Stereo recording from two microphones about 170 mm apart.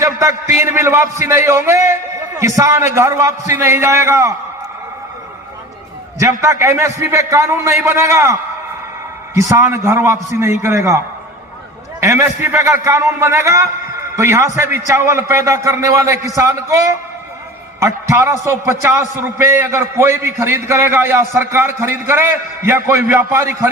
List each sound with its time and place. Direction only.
0.0 s a sound: 20° right (ahead or behind)
0.5 s a man's voice: 15° right (ahead or behind)
6.4 s a man's voice: 15° right (ahead or behind)
9.4 s a man's voice: 15° right (ahead or behind)